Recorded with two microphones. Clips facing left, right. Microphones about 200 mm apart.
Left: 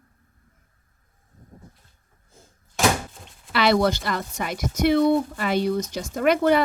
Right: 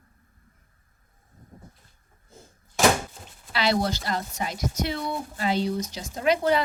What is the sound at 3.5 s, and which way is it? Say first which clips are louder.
Speech: left 5 dB; 65° left (ahead or behind).